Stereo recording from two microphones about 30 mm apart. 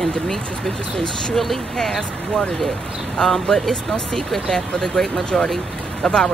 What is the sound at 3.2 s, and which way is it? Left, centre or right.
Speech, centre.